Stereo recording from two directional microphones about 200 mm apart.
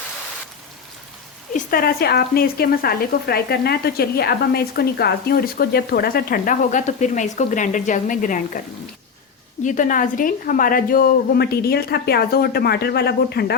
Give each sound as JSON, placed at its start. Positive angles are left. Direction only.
{"t": 1.5, "sound": "speech", "side_deg": 50}
{"t": 9.6, "sound": "speech", "side_deg": 40}